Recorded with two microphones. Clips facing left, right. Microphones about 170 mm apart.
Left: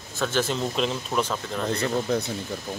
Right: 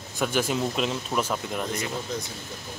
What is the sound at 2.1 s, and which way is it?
Speech, 60° left (ahead or behind).